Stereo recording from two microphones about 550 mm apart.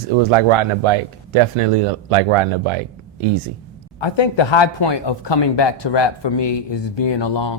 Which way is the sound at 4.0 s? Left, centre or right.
Left.